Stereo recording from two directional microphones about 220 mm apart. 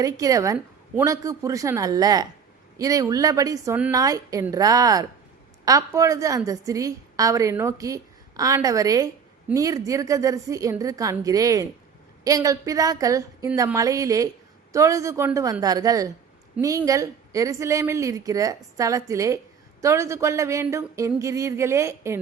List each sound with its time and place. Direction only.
0.0 s a woman's voice: 15° right (ahead or behind)